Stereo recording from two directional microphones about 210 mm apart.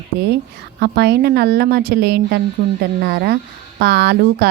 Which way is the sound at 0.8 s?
50° right (ahead or behind).